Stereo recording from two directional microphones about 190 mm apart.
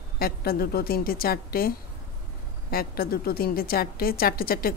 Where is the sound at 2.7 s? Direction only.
50° left (ahead or behind).